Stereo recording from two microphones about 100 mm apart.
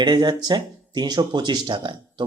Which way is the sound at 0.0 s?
45° right (ahead or behind).